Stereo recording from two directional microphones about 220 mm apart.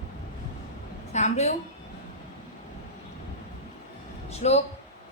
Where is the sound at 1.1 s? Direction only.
30° left (ahead or behind).